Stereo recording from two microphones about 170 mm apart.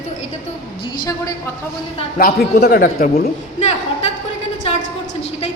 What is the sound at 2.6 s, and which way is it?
Speech, 70° left (ahead or behind).